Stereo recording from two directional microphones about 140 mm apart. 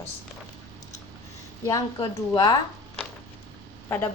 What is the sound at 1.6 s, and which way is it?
Speech, 25° left (ahead or behind).